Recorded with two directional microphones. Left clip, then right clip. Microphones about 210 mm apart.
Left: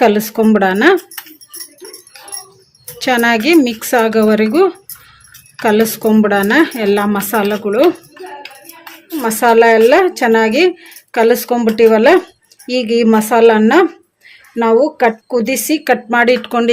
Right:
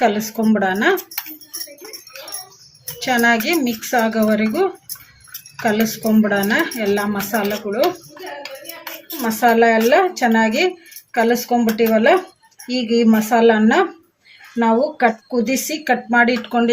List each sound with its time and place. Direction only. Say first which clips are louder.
0.0 s a woman's voice: left 6 dB; 55° left (ahead or behind)
3.0 s a woman's voice: left 4 dB; 55° left (ahead or behind)
9.2 s a woman's voice: left 5 dB; 55° left (ahead or behind)